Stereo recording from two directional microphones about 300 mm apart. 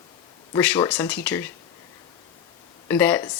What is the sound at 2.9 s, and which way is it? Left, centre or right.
Speech, centre.